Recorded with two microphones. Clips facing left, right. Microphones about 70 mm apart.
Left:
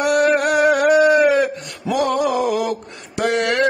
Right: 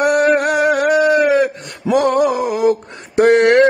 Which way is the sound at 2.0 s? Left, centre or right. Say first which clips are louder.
Right 4 dB; right.